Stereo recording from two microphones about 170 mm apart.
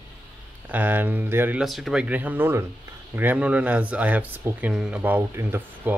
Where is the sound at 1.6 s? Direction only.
Centre (ahead or behind).